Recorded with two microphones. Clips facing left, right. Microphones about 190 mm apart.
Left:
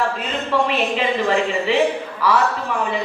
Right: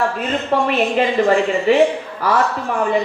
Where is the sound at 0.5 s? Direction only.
50° right (ahead or behind).